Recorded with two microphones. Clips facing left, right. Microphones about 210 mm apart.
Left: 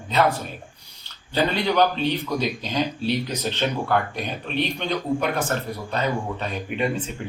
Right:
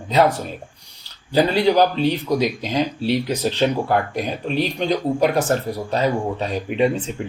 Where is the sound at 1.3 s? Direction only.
35° right (ahead or behind).